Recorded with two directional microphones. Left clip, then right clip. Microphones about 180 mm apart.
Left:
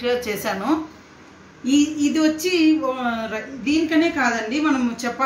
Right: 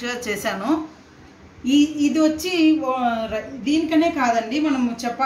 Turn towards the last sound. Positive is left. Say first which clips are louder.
# left 1 dB
turn(degrees=10)  # may be behind; listen again after turning